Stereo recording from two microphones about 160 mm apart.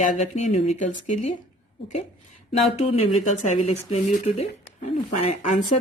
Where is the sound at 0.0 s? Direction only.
50° left (ahead or behind).